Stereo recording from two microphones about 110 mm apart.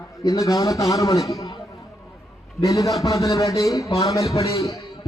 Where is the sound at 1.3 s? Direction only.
30° left (ahead or behind).